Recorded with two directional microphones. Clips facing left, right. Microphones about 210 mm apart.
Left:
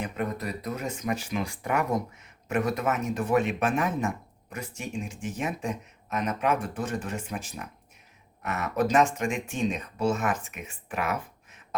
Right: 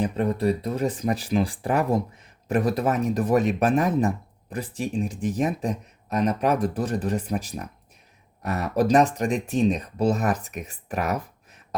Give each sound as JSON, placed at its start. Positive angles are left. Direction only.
{"t": 0.0, "sound": "speech", "side_deg": -30}